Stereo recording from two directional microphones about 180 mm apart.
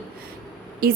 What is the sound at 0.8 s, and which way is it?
Speech, 55° right (ahead or behind).